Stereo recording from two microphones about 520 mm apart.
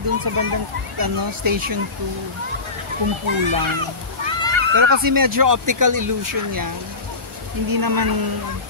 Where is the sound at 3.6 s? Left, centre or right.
Right.